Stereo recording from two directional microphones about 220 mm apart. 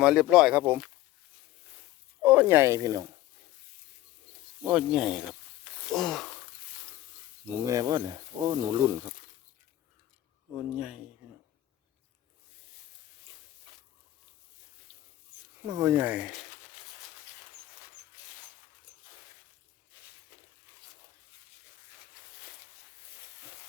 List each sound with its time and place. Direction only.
0.0 s speech: centre (ahead or behind)
2.2 s speech: 5° right (ahead or behind)
4.6 s speech: 5° right (ahead or behind)
7.5 s speech: 15° right (ahead or behind)
10.5 s speech: centre (ahead or behind)
15.6 s speech: 15° right (ahead or behind)
19.9 s walk: 5° right (ahead or behind)